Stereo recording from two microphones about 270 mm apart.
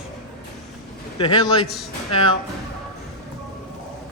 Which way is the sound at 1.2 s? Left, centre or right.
Centre.